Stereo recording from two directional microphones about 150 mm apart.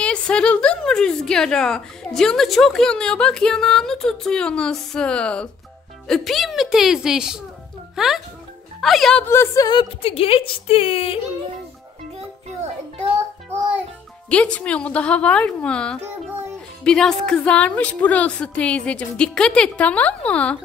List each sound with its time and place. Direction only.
0.0 s a woman's voice: 5° left (ahead or behind)
9.3 s a woman's voice: 15° left (ahead or behind)
9.7 s speech: 35° left (ahead or behind)
14.3 s a woman's voice: 10° left (ahead or behind)